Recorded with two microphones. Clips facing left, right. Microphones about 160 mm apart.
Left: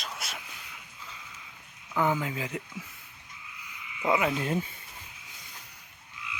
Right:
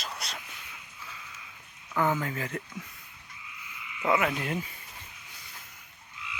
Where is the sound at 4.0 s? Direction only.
15° left (ahead or behind).